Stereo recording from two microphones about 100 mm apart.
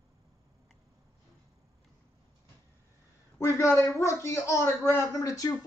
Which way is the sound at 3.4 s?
30° left (ahead or behind).